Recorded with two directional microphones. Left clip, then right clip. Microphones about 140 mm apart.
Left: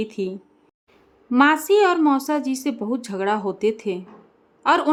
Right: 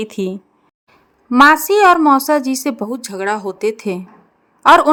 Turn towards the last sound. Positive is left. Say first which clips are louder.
# right 10 dB
turn(degrees=-35)  # may be behind; listen again after turning